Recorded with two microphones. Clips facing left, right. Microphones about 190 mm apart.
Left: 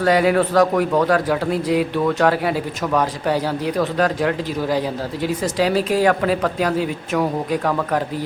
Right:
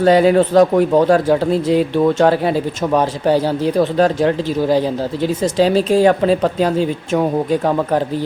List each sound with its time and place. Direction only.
0.0 s speech: 30° right (ahead or behind)